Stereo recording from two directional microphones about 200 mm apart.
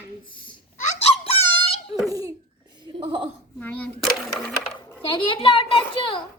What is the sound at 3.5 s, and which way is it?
Speech, 5° left (ahead or behind).